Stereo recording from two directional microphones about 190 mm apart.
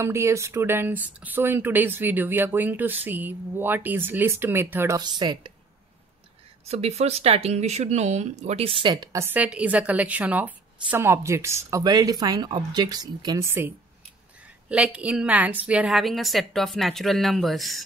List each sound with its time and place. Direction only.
0.0 s speech: 15° right (ahead or behind)
6.7 s a woman's voice: 35° right (ahead or behind); by 17.8 s centre (ahead or behind)